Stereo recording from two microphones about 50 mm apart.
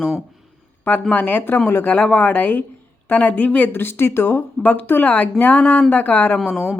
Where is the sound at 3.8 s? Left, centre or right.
Left.